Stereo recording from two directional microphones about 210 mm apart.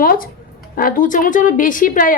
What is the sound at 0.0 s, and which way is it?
A woman's voice, 45° left (ahead or behind).